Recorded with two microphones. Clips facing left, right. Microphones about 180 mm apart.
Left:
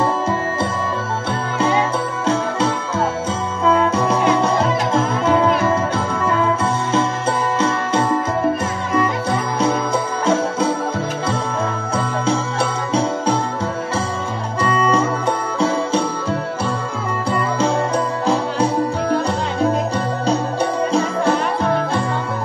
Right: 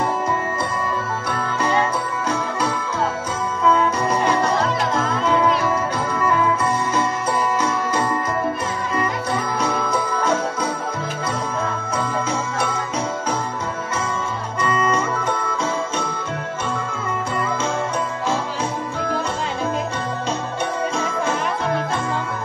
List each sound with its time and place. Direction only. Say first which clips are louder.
2.2 s music: left 6 dB; 25° left (ahead or behind)
7.6 s music: left 3 dB; 25° left (ahead or behind)
9.6 s music: left 3 dB; 30° left (ahead or behind)
12.3 s music: left 4 dB; 30° left (ahead or behind)
14.6 s music: left 3 dB; 30° left (ahead or behind)
18.2 s music: left 7 dB; 35° left (ahead or behind)